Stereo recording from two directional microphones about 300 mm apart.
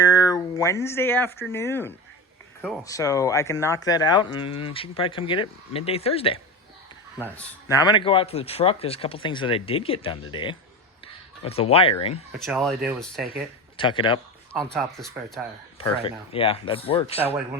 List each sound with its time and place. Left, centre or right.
0.0 s a sound: centre
1.5 s speech: centre
12.5 s speech: centre
13.7 s speech: centre
14.5 s speech: centre
15.8 s speech: centre